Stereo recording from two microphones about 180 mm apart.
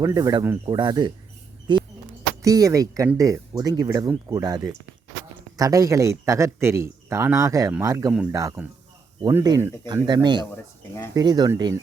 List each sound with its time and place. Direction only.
0.0 s speech: 20° right (ahead or behind)
1.7 s a sound: 25° right (ahead or behind)
2.4 s speech: 20° right (ahead or behind)
10.5 s speech: 15° left (ahead or behind)
11.1 s speech: 20° right (ahead or behind)